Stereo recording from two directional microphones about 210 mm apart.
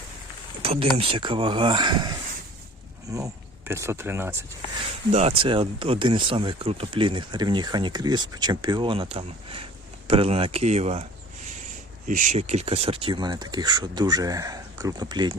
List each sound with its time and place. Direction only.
0.6 s speech: 30° right (ahead or behind); by 4.4 s 10° right (ahead or behind)
5.1 s speech: 25° right (ahead or behind)
12.0 s speech: 40° right (ahead or behind); by 15.4 s 20° right (ahead or behind)